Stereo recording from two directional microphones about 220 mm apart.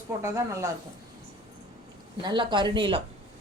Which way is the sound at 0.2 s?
15° right (ahead or behind).